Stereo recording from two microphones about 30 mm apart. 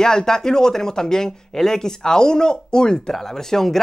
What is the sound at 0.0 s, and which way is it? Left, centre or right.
Speech, centre.